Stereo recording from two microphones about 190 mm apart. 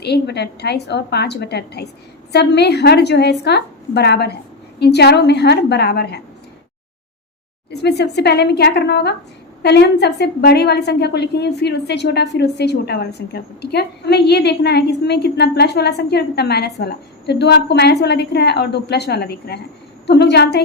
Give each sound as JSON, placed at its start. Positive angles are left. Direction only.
{"t": 0.0, "sound": "a woman's voice", "side_deg": 60}
{"t": 7.7, "sound": "a woman's voice", "side_deg": 60}